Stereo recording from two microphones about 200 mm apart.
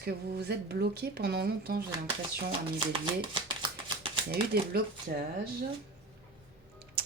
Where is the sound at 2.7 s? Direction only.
25° right (ahead or behind).